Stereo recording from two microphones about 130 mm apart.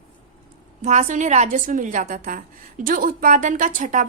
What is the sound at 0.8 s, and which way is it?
A woman's voice, 65° right (ahead or behind).